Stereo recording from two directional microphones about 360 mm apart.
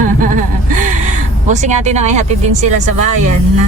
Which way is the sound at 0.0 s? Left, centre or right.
Right.